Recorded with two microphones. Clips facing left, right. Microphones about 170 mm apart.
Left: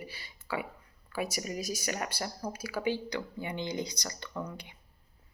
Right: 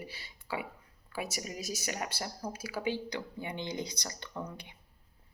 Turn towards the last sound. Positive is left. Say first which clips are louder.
# left 2 dB
turn(degrees=-25)  # may be behind; listen again after turning